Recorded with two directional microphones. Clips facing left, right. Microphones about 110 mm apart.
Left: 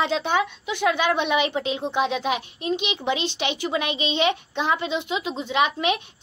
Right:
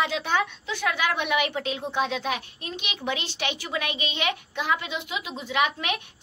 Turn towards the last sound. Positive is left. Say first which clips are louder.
# left 4 dB
turn(degrees=25)  # may be behind; listen again after turning